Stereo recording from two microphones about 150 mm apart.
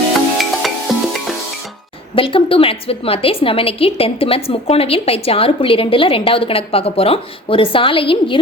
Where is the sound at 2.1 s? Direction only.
35° left (ahead or behind).